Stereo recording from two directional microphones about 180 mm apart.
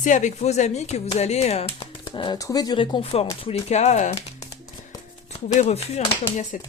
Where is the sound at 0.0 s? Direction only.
45° left (ahead or behind).